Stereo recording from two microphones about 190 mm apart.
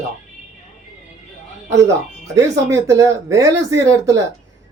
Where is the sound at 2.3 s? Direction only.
15° right (ahead or behind).